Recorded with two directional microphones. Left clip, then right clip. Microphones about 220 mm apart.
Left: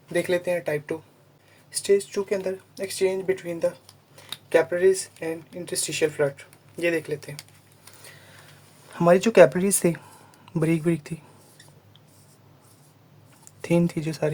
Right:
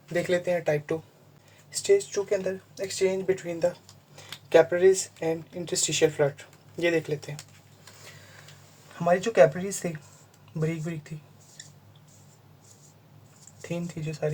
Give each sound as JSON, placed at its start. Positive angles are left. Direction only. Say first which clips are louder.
{"t": 0.1, "sound": "speech", "louder": "left 2 dB", "side_deg": 25}
{"t": 3.4, "sound": "speech", "louder": "left 1 dB", "side_deg": 15}
{"t": 9.0, "sound": "speech", "louder": "left 5 dB", "side_deg": 50}
{"t": 13.6, "sound": "speech", "louder": "left 11 dB", "side_deg": 45}